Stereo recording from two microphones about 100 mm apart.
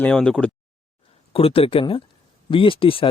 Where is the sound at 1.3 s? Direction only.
75° left (ahead or behind).